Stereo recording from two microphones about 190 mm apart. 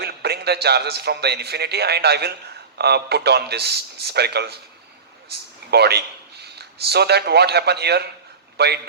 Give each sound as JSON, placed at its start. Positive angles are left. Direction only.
{"t": 0.0, "sound": "a man's voice", "side_deg": -60}
{"t": 5.7, "sound": "a man's voice", "side_deg": -60}